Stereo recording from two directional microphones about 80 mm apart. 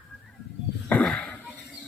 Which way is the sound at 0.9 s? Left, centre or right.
Centre.